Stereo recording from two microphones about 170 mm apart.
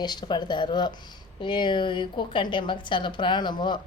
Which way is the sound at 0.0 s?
25° left (ahead or behind).